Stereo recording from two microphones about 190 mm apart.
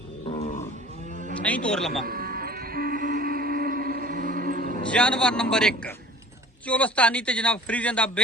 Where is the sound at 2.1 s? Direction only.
50° right (ahead or behind).